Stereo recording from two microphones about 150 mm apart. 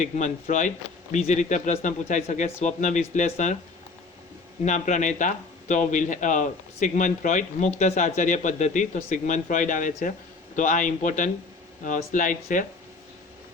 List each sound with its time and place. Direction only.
0.0 s speech: 55° left (ahead or behind)
4.6 s speech: 55° left (ahead or behind)